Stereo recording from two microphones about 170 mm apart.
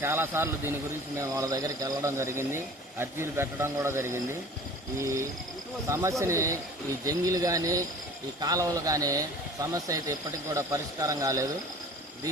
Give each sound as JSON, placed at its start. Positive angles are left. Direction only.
{"t": 0.0, "sound": "speech", "side_deg": -15}